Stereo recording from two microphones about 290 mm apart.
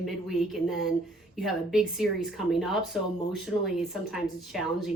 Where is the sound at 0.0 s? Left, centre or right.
Centre.